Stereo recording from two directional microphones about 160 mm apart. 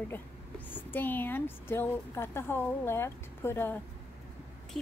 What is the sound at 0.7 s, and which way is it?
A woman's voice, 10° left (ahead or behind).